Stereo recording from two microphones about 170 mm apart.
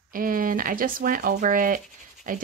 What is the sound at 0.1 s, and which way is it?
Speech, 55° right (ahead or behind).